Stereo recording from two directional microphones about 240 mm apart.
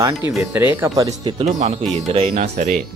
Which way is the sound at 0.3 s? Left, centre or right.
Centre.